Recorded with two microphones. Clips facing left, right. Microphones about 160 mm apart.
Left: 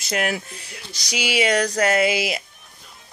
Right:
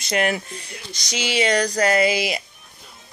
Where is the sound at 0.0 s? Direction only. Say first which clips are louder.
Right 2 dB; 5° left (ahead or behind).